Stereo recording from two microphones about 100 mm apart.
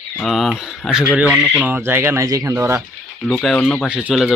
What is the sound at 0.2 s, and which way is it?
Speech, 5° left (ahead or behind).